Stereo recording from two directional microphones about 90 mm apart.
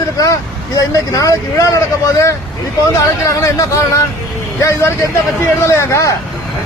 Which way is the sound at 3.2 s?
35° left (ahead or behind).